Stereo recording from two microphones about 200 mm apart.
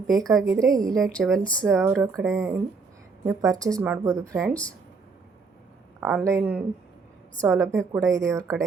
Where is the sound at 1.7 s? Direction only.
10° right (ahead or behind).